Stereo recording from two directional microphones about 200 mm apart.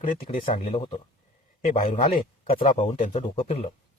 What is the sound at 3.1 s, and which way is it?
Speech, 30° left (ahead or behind).